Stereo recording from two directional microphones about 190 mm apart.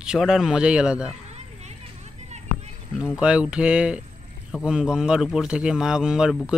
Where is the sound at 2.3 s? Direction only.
35° right (ahead or behind).